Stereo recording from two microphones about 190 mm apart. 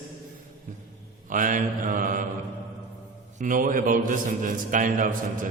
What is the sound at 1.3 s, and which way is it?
Speech, 45° right (ahead or behind).